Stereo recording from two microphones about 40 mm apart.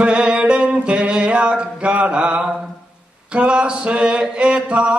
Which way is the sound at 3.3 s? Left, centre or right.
Right.